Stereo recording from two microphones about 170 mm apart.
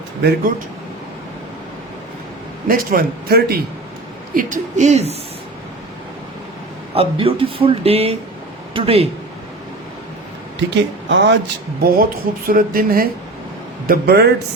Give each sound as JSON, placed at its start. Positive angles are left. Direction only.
{"t": 0.2, "sound": "a man's voice", "side_deg": -70}
{"t": 2.6, "sound": "a man's voice", "side_deg": -60}
{"t": 4.4, "sound": "speech", "side_deg": -50}
{"t": 6.9, "sound": "speech", "side_deg": -35}
{"t": 11.1, "sound": "speech", "side_deg": -90}
{"t": 11.8, "sound": "a man's voice", "side_deg": -60}